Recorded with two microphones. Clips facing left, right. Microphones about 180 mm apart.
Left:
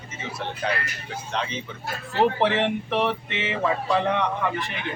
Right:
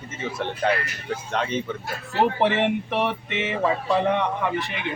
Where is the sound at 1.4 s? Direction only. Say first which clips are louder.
Right 2 dB; 50° right (ahead or behind).